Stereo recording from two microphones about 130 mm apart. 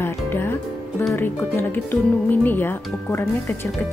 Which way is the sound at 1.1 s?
15° left (ahead or behind).